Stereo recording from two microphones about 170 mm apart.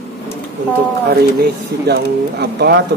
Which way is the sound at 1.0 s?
70° right (ahead or behind).